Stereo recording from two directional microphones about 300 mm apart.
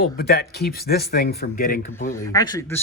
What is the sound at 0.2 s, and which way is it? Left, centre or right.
Speech, left.